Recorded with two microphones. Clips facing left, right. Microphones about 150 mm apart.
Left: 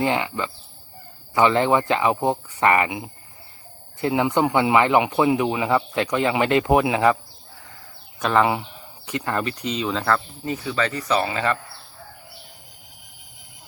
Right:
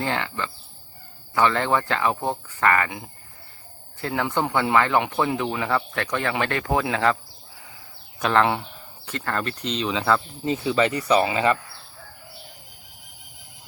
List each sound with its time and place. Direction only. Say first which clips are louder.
0.0 s speech: left 4 dB; 15° left (ahead or behind)
4.0 s speech: left 5 dB; 15° left (ahead or behind)
8.2 s speech: left 1 dB; 5° left (ahead or behind)
9.0 s speech: left 3 dB; 15° left (ahead or behind); by 10.2 s centre (ahead or behind)
10.4 s speech: right 3 dB; 25° right (ahead or behind)